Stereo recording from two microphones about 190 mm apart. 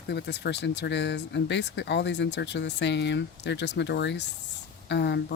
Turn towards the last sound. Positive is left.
turn(degrees=65)  # may be behind; listen again after turning